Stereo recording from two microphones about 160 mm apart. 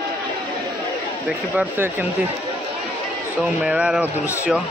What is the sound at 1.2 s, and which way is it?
Speech, 10° right (ahead or behind).